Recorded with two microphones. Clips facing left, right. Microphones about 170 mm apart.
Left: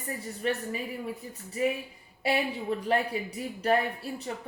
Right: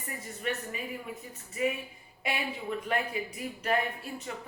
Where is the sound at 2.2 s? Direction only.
35° left (ahead or behind).